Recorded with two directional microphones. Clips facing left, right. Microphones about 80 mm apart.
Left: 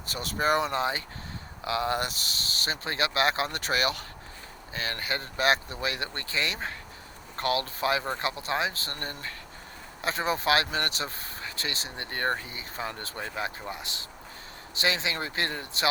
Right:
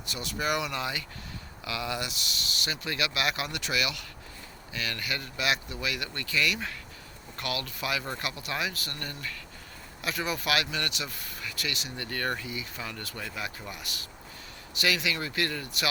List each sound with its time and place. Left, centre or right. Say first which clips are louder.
0.0 s speech: left 4 dB; left